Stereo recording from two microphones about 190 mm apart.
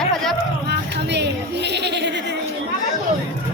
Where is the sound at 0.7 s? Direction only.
65° right (ahead or behind).